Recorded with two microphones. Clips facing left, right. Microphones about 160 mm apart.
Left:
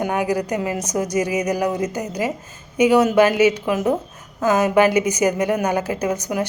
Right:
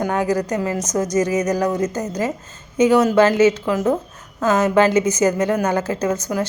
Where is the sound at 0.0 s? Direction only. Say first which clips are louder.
Right 1 dB; 15° left (ahead or behind).